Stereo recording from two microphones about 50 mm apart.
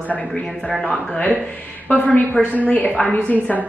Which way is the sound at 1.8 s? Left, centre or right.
Left.